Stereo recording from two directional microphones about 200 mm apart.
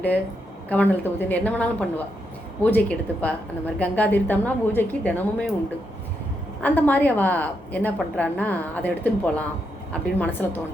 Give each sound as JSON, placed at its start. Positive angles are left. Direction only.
{"t": 0.7, "sound": "a woman's voice", "side_deg": 10}
{"t": 6.6, "sound": "a woman's voice", "side_deg": 10}